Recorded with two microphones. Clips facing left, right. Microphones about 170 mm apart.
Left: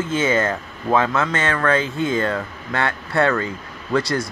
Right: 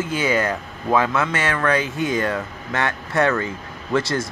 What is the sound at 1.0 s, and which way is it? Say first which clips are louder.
Speech: left 1 dB; 20° right (ahead or behind).